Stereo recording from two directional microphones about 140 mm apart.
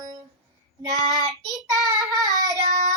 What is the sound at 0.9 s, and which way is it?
Child singing, 25° right (ahead or behind).